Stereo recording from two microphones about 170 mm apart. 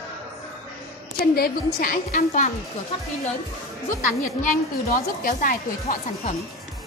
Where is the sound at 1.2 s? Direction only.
65° left (ahead or behind); by 2.5 s 45° left (ahead or behind).